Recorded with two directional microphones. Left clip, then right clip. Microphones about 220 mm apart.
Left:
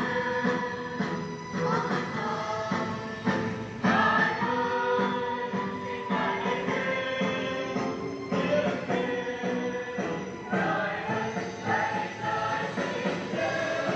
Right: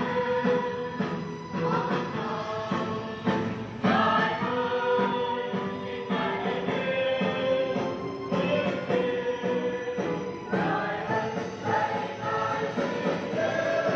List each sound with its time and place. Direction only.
0.0 s music: 25° right (ahead or behind)
3.3 s music: 30° right (ahead or behind)